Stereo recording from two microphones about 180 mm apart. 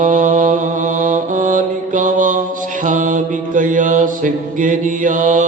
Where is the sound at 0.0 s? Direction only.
45° right (ahead or behind).